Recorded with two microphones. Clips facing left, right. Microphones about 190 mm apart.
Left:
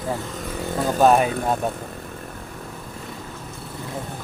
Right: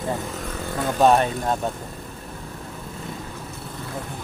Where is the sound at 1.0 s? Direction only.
5° left (ahead or behind).